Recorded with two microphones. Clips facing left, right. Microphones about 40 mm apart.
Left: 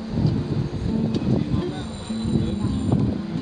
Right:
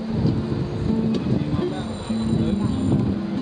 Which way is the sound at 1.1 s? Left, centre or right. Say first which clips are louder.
Even; centre.